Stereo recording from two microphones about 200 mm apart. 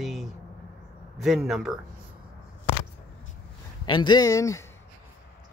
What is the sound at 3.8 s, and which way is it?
Speech, 20° left (ahead or behind).